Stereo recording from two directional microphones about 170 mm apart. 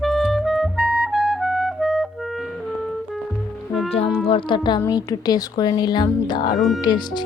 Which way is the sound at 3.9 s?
35° left (ahead or behind).